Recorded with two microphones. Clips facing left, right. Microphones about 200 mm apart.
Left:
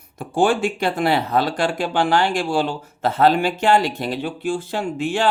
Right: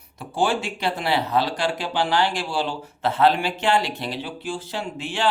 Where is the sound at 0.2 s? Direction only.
50° left (ahead or behind).